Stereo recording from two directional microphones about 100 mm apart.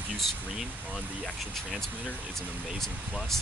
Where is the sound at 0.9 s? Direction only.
10° left (ahead or behind).